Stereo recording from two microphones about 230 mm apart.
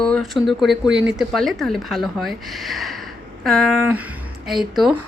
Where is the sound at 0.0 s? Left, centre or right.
Centre.